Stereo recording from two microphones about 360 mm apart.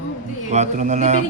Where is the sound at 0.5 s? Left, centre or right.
Centre.